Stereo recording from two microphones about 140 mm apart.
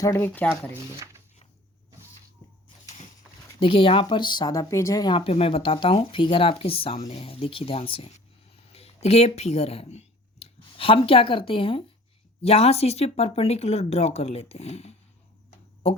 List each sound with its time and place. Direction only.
0.0 s speech: 20° left (ahead or behind)
3.6 s speech: 40° left (ahead or behind)
15.4 s a sound: 45° left (ahead or behind)